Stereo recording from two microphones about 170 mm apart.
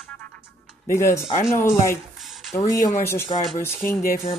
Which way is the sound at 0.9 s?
15° left (ahead or behind).